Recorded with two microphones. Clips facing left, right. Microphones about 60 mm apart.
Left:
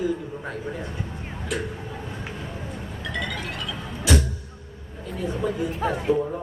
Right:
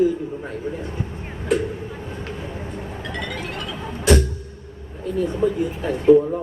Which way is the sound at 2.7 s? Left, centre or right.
Right.